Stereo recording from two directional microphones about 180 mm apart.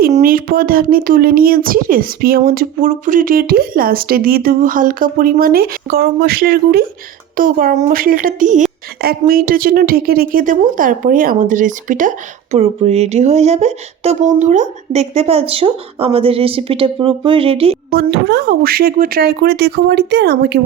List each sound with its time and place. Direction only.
0.1 s speech: 50° right (ahead or behind)
9.0 s a woman's voice: 60° right (ahead or behind); by 17.7 s 30° right (ahead or behind)
17.9 s speech: 65° right (ahead or behind)